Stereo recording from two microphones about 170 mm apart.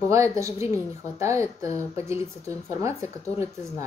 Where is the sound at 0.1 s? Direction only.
15° right (ahead or behind).